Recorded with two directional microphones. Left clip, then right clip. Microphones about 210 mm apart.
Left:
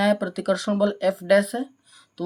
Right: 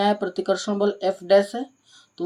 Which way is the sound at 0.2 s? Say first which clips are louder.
Right 1 dB; 50° left (ahead or behind).